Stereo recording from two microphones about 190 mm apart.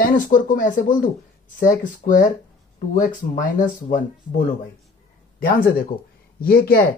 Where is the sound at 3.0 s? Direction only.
45° left (ahead or behind).